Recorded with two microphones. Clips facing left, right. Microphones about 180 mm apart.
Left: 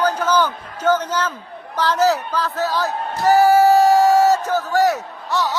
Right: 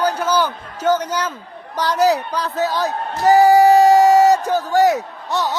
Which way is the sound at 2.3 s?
15° right (ahead or behind).